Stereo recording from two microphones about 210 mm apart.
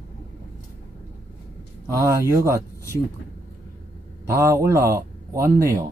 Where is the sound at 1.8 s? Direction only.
15° right (ahead or behind).